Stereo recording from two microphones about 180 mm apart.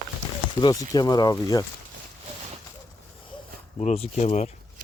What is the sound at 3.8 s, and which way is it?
Speech, 40° left (ahead or behind).